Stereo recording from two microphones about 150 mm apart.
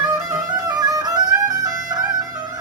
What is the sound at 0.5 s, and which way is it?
Music, 25° right (ahead or behind).